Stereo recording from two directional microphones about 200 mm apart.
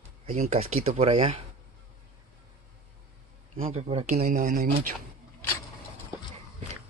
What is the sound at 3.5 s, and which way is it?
Speech, 30° right (ahead or behind).